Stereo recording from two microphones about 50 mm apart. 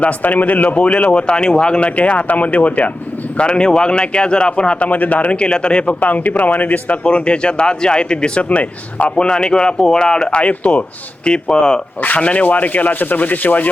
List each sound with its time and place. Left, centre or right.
0.0 s speech: left
6.0 s speech: left; by 11.8 s centre
12.0 s speech: left